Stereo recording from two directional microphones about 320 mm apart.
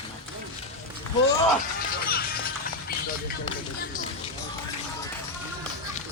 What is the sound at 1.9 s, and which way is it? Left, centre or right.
Music, left.